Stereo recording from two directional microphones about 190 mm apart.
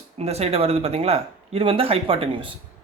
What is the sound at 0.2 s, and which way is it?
Speech, 35° right (ahead or behind).